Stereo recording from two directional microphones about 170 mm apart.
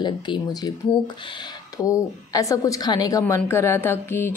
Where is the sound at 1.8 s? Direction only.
20° left (ahead or behind).